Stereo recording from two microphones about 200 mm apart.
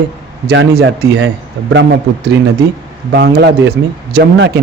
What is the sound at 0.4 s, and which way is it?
Speech, 60° right (ahead or behind).